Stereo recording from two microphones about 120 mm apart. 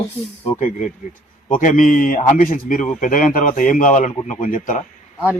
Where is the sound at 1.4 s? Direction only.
90° left.